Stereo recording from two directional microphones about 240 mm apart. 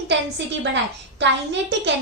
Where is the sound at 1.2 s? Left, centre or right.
Right.